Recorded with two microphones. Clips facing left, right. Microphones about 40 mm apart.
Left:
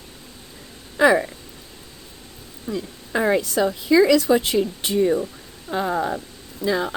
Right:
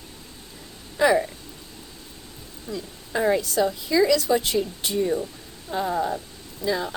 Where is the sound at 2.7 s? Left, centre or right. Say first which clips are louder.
Left 4 dB; left.